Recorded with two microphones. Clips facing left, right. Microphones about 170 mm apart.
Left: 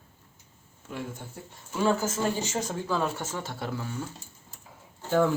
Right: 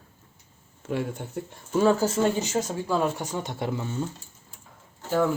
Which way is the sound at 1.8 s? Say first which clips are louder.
Right 4 dB; 30° right (ahead or behind).